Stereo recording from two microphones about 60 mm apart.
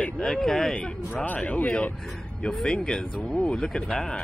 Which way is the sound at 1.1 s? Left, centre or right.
Left.